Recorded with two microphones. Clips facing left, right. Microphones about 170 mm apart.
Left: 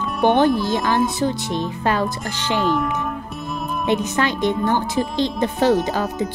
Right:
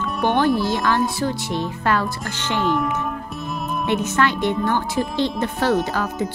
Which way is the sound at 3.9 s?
15° left (ahead or behind).